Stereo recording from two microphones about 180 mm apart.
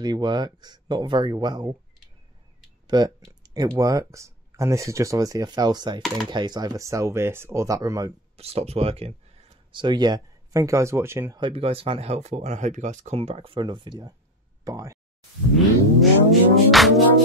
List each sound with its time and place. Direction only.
0.0 s speech: 25° right (ahead or behind)
2.9 s speech: 25° right (ahead or behind)
8.4 s speech: 35° right (ahead or behind); by 11.4 s 15° right (ahead or behind)
11.4 s speech: 30° right (ahead or behind)
16.0 s music: centre (ahead or behind)